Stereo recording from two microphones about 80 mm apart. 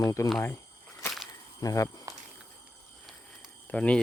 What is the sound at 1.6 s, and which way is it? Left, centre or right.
Speech, left.